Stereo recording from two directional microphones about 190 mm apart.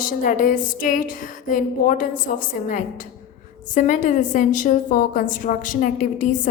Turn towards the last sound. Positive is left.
turn(degrees=40)  # may be behind; listen again after turning